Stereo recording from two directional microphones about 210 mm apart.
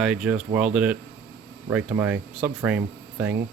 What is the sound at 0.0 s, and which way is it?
Speech, 5° right (ahead or behind).